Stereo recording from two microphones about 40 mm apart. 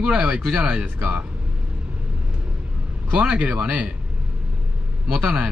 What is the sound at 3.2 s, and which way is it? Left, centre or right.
Speech, right.